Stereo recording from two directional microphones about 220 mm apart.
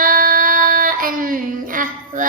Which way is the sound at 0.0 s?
40° right (ahead or behind).